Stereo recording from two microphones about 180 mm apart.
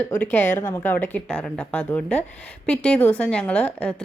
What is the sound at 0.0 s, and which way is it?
A woman's voice, 10° left (ahead or behind).